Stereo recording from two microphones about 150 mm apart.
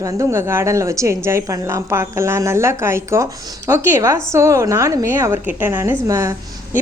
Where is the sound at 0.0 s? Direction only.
20° right (ahead or behind).